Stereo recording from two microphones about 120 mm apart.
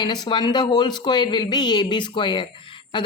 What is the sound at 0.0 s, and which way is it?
A woman's voice, 40° left (ahead or behind).